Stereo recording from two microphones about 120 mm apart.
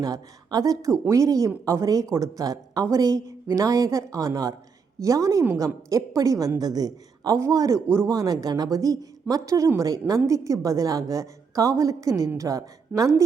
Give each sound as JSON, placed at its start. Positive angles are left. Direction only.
{"t": 0.0, "sound": "a woman's voice", "side_deg": -30}